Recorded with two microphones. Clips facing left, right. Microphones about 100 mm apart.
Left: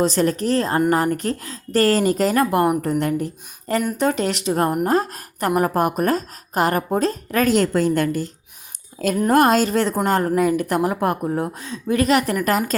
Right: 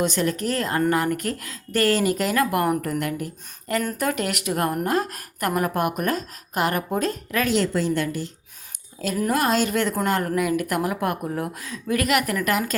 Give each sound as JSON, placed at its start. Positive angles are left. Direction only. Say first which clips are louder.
{"t": 0.0, "sound": "speech", "louder": "left 4 dB", "side_deg": 35}
{"t": 9.3, "sound": "speech", "louder": "left 6 dB", "side_deg": 45}